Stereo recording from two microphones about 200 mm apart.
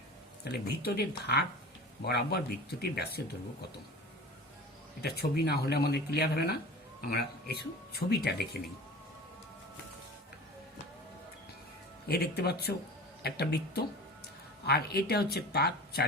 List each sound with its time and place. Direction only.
0.4 s speech: 55° left (ahead or behind)
5.0 s speech: 50° left (ahead or behind)
12.0 s speech: 50° left (ahead or behind)